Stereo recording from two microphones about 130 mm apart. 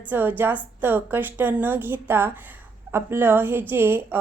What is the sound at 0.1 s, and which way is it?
A woman's voice, 15° right (ahead or behind).